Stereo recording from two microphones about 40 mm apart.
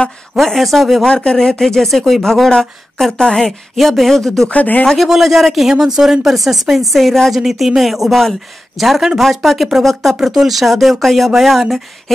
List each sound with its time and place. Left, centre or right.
0.4 s speech: centre
1.0 s speech: centre
3.7 s speech: centre
4.5 s speech: left
4.9 s speech: centre
10.2 s speech: centre